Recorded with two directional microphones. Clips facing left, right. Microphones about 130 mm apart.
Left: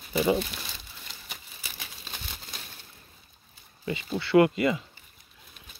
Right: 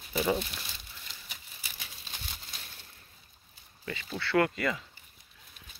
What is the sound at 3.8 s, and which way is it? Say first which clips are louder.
Speech: left 6 dB; 15° left (ahead or behind).